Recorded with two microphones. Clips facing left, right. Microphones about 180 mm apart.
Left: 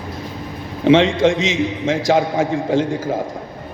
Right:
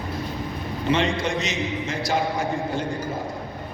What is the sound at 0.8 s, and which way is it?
A man's voice, 90° left.